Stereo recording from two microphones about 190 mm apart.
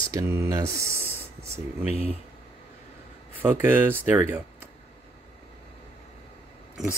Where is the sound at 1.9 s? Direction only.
30° left (ahead or behind).